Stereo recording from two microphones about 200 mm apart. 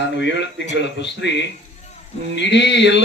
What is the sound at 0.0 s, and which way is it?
A man's voice, 60° left (ahead or behind).